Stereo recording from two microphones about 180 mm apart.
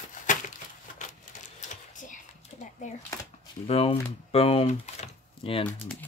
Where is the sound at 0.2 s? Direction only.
45° left (ahead or behind).